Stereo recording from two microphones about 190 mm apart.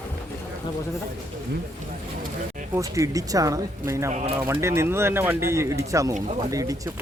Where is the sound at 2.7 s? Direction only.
15° right (ahead or behind).